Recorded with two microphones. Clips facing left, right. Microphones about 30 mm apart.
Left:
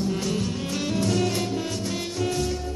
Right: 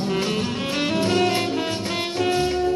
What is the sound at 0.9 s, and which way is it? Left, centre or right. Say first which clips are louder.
Music: right 4 dB; right.